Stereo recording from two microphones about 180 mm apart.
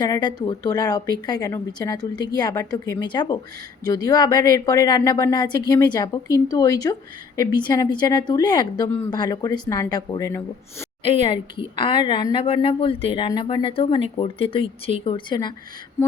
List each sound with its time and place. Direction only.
0.0 s a woman's voice: 25° left (ahead or behind)
11.0 s a woman's voice: 30° left (ahead or behind)